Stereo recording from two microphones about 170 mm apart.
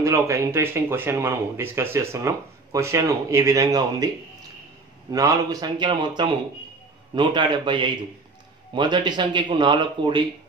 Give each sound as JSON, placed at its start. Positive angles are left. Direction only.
{"t": 0.0, "sound": "speech", "side_deg": -20}